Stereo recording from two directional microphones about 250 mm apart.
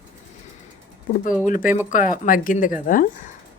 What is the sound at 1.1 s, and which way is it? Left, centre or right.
Speech, left.